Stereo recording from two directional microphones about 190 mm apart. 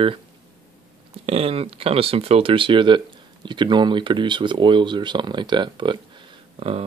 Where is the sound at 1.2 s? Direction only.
30° right (ahead or behind).